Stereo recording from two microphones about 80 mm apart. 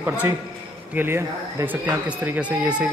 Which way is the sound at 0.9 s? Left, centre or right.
Right.